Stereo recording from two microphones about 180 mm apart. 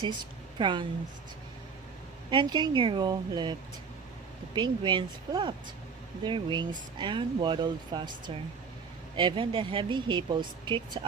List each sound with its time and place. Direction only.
0.0 s speech: 25° right (ahead or behind)
2.3 s speech: 25° right (ahead or behind)
4.5 s speech: 25° right (ahead or behind)
9.1 s speech: 25° right (ahead or behind)